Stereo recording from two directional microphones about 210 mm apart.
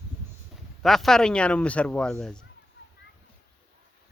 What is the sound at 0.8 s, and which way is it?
Speech, centre (ahead or behind).